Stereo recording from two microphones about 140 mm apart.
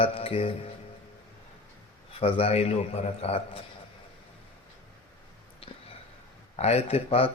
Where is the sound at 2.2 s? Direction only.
45° left (ahead or behind).